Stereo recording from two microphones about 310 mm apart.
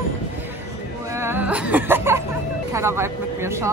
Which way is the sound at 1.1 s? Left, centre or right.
Centre.